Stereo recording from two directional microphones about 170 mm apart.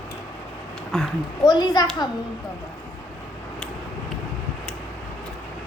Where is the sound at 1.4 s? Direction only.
25° left (ahead or behind).